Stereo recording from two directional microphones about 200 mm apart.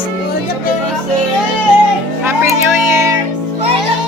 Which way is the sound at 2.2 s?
10° right (ahead or behind).